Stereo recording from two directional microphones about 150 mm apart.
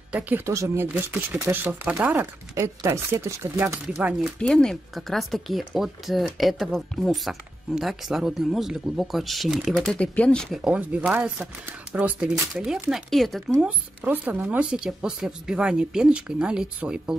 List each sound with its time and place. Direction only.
0.1 s speech: 15° right (ahead or behind)
4.4 s speech: 5° left (ahead or behind)
10.6 s speech: 10° right (ahead or behind)
13.7 s speech: 10° right (ahead or behind)